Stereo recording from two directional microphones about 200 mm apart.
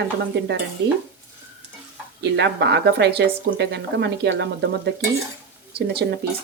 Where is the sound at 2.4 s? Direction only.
60° right (ahead or behind).